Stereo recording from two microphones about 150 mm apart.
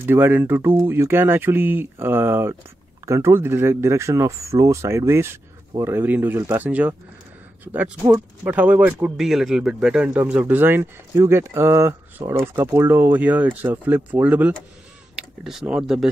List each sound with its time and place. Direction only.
0.0 s speech: 15° right (ahead or behind)